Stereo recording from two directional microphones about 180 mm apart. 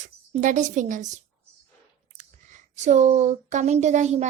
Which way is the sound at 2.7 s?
40° right (ahead or behind).